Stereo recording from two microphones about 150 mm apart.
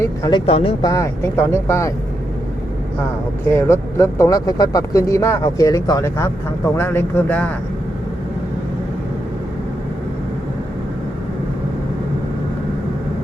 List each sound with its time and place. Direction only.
0.0 s speech: 25° left (ahead or behind)
0.8 s speech: 25° left (ahead or behind)
3.5 s speech: 20° left (ahead or behind)